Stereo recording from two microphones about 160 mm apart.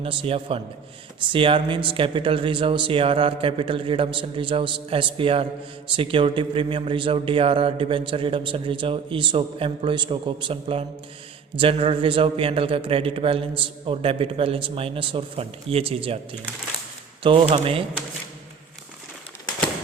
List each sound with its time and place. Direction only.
0.0 s a man's voice: 35° right (ahead or behind)
17.2 s a man's voice: 35° right (ahead or behind)